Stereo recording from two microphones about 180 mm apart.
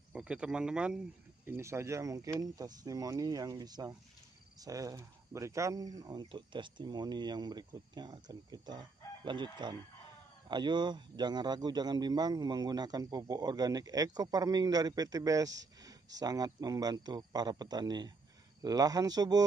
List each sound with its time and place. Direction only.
0.1 s speech: 5° right (ahead or behind)